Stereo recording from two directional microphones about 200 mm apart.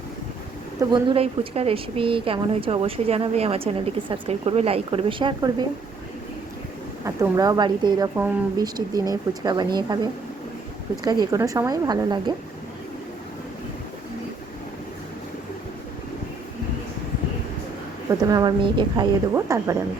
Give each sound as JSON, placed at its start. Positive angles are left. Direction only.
{"t": 0.8, "sound": "speech", "side_deg": -25}
{"t": 7.0, "sound": "speech", "side_deg": -15}
{"t": 11.0, "sound": "speech", "side_deg": -20}
{"t": 18.1, "sound": "speech", "side_deg": -20}